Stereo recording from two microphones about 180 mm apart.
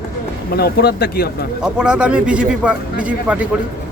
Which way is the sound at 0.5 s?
60° left (ahead or behind).